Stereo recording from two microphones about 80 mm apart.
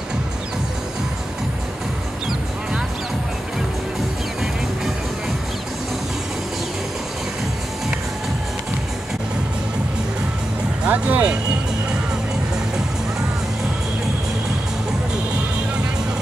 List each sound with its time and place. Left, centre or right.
10.9 s speech: right